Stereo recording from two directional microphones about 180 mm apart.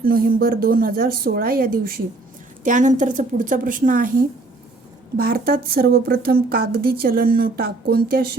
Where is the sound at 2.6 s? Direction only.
45° right (ahead or behind).